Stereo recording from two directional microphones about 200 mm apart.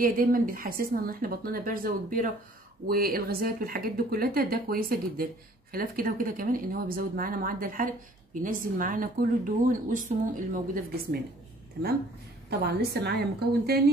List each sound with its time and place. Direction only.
0.0 s speech: 45° right (ahead or behind)
12.4 s speech: 55° right (ahead or behind)